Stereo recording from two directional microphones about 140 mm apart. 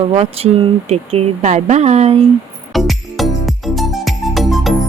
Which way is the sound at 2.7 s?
Centre (ahead or behind).